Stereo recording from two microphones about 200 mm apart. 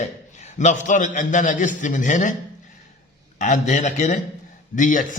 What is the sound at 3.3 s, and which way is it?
A man's voice, 35° left (ahead or behind).